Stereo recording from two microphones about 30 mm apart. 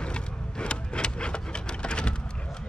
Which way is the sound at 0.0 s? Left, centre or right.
Left.